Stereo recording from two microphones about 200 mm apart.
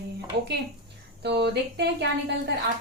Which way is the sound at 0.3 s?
60° right (ahead or behind).